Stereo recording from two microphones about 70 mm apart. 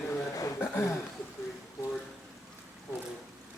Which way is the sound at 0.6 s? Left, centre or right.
Left.